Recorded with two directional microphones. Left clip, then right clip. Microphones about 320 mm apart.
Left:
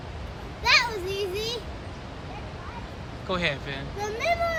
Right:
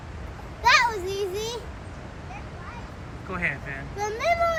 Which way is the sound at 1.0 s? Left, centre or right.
Centre.